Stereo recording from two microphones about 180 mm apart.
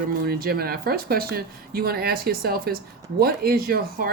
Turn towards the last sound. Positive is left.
turn(degrees=-55)  # may be behind; listen again after turning